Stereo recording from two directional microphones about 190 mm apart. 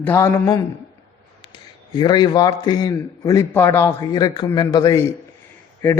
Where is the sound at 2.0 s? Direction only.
20° left (ahead or behind).